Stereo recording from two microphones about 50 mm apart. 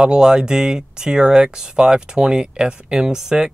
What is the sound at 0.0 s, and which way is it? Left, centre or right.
Speech, centre.